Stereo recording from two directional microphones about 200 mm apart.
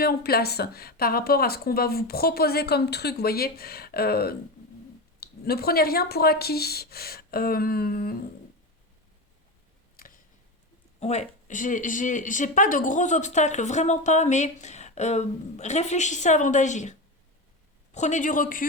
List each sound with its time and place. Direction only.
0.0 s speech: 50° left (ahead or behind)
10.0 s a sound: 45° left (ahead or behind)
11.0 s speech: 35° left (ahead or behind)